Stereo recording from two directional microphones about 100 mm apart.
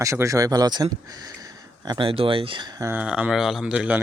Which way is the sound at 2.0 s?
65° right (ahead or behind).